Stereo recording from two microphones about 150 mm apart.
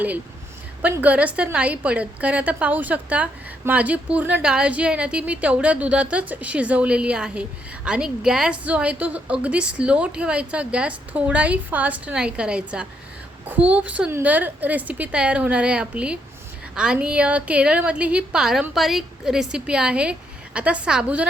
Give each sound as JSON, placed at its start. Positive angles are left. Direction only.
{"t": 0.8, "sound": "a woman's voice", "side_deg": -10}